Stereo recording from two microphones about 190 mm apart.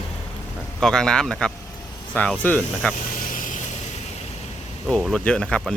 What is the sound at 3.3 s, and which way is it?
Vehicle, 45° left (ahead or behind).